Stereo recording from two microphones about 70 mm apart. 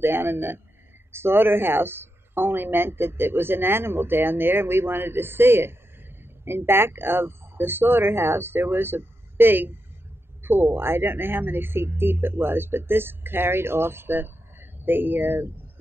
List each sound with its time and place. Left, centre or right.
0.0 s speech: right